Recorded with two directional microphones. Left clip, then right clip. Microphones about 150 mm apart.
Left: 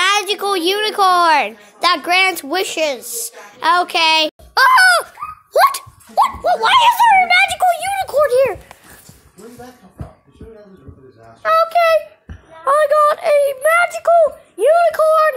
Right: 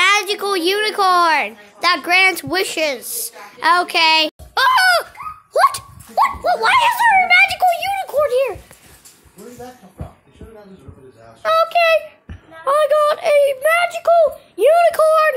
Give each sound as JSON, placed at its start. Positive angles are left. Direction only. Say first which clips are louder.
{"t": 0.0, "sound": "a woman's voice", "louder": "even", "side_deg": 0}
{"t": 1.3, "sound": "a woman's voice", "louder": "left 3 dB", "side_deg": 15}
{"t": 4.6, "sound": "a sound", "louder": "left 3 dB", "side_deg": 10}
{"t": 5.5, "sound": "speech", "louder": "left 2 dB", "side_deg": 10}
{"t": 7.9, "sound": "a sound", "louder": "left 3 dB", "side_deg": 30}
{"t": 11.4, "sound": "a child's voice", "louder": "left 1 dB", "side_deg": -20}
{"t": 14.7, "sound": "speech", "louder": "even", "side_deg": -35}